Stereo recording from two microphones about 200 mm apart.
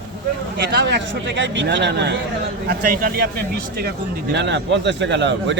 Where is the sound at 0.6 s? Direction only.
60° right (ahead or behind).